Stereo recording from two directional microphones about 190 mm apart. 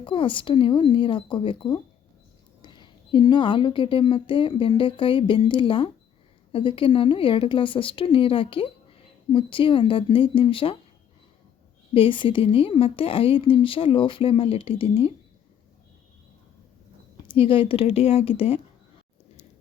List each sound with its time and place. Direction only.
0.0 s a woman's voice: 25° left (ahead or behind)
11.9 s a woman's voice: 25° left (ahead or behind)
17.2 s a woman's voice: 30° left (ahead or behind)